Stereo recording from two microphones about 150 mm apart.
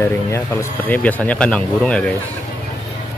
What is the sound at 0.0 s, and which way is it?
Speech, 15° left (ahead or behind).